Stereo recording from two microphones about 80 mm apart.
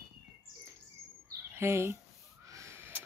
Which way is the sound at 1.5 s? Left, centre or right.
Right.